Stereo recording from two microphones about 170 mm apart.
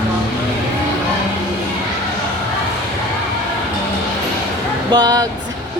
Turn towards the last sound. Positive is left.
turn(degrees=-25)  # may be behind; listen again after turning